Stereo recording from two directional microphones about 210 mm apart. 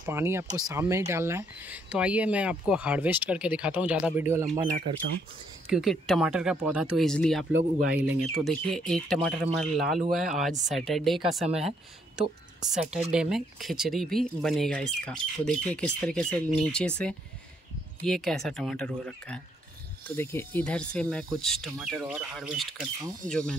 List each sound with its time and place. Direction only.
0.0 s speech: 10° right (ahead or behind)
4.6 s speech: 35° right (ahead or behind)
5.7 s speech: centre (ahead or behind)